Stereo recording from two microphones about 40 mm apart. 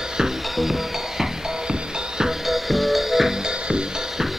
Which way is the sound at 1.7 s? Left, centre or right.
Centre.